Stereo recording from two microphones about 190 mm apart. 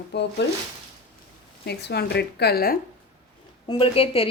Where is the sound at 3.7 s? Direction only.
30° left (ahead or behind).